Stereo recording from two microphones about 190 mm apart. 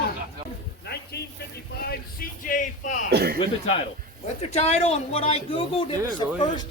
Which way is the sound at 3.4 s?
30° left (ahead or behind).